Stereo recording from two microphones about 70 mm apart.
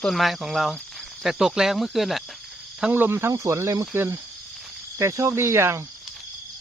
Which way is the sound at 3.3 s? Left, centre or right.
Right.